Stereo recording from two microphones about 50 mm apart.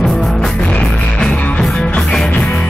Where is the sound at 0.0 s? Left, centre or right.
Centre.